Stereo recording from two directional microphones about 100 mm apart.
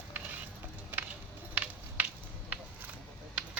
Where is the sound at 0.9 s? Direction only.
20° right (ahead or behind).